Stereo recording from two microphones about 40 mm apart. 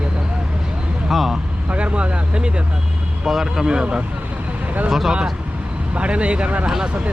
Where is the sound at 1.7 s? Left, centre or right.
Right.